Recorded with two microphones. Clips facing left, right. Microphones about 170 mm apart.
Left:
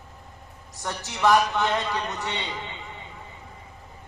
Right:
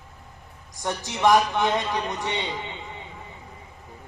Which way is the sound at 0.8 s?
15° right (ahead or behind).